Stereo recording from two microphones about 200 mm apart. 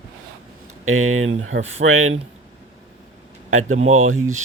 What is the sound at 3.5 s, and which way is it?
Speech, 90° right.